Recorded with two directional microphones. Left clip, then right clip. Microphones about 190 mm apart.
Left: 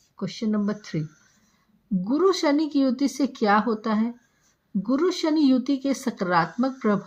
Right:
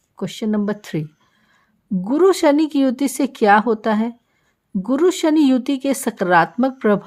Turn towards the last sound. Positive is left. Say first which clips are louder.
# right 7 dB
turn(degrees=-40)  # may be behind; listen again after turning